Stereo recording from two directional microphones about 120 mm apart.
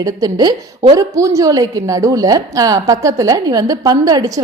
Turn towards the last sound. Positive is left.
turn(degrees=-30)  # may be behind; listen again after turning